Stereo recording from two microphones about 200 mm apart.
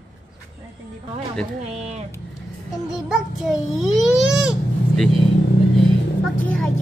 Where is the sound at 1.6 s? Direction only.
30° right (ahead or behind).